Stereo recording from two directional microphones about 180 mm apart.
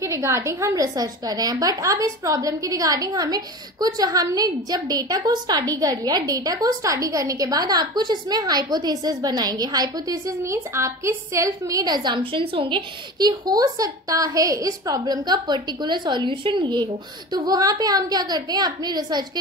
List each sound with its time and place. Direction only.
0.0 s a woman's voice: 15° right (ahead or behind)